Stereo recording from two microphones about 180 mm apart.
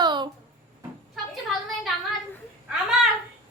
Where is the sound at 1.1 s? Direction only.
Centre (ahead or behind).